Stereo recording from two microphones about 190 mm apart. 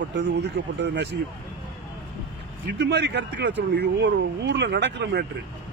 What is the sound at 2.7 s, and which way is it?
Speech, 65° right (ahead or behind).